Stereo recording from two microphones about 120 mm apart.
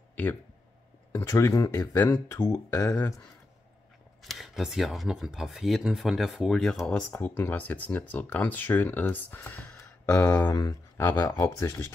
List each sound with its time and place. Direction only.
0.1 s a sound: 15° left (ahead or behind)
1.1 s speech: 25° left (ahead or behind)
4.2 s speech: centre (ahead or behind); by 11.9 s 25° left (ahead or behind)